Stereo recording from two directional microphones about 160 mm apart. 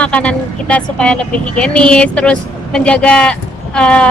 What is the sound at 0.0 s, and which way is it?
Speech, 5° left (ahead or behind).